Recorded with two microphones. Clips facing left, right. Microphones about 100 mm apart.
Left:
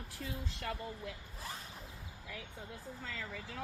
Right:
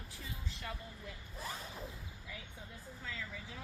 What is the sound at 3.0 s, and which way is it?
Speech, 75° left (ahead or behind).